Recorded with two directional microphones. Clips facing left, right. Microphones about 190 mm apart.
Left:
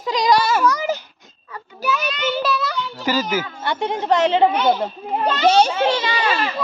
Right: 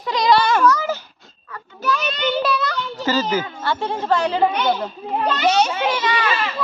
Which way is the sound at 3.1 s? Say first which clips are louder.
Right 1 dB; 10° left (ahead or behind).